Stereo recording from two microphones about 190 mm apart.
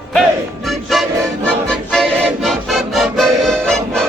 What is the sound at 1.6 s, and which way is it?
Music, centre (ahead or behind).